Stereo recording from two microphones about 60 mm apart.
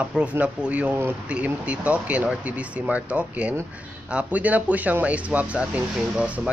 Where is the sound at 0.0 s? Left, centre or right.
Right.